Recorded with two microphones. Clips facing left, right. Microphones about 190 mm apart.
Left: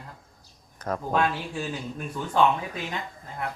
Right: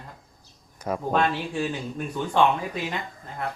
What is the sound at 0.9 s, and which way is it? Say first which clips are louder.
Speech: right 1 dB; 10° right (ahead or behind).